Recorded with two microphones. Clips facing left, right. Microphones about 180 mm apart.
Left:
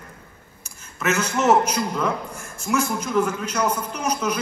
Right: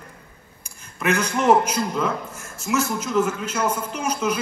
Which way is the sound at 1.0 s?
15° right (ahead or behind).